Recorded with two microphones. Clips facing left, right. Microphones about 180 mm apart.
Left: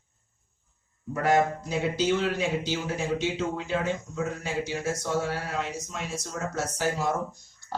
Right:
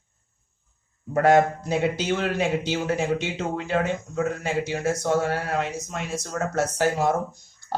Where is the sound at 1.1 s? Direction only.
60° right (ahead or behind).